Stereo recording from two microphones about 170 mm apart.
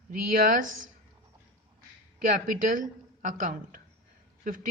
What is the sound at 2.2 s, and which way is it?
A woman's voice, 50° right (ahead or behind).